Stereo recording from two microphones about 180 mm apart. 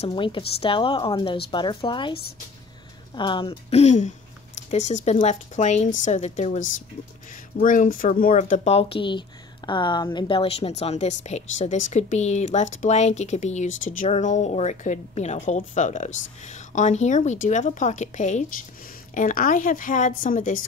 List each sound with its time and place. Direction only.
0.0 s a woman's voice: 30° left (ahead or behind)
3.2 s a woman's voice: 25° left (ahead or behind); by 20.5 s 50° left (ahead or behind)